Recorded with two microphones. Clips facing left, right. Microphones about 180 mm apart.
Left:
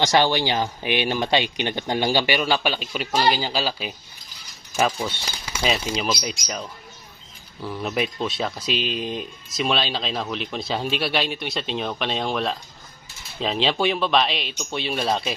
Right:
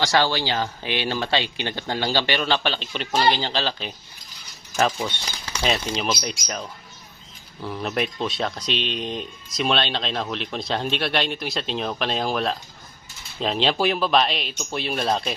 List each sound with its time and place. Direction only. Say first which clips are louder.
0.0 s speech: left 2 dB; 20° left (ahead or behind); by 15.4 s centre (ahead or behind)